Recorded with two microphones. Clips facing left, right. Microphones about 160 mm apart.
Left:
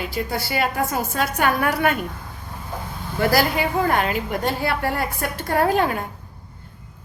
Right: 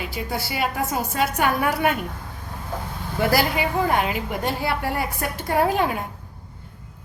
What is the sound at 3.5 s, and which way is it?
A woman's voice, 10° right (ahead or behind).